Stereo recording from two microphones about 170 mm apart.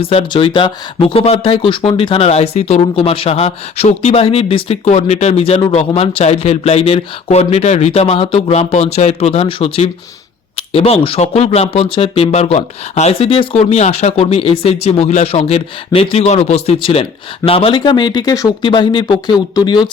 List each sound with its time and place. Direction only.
0.0 s speech: 35° left (ahead or behind)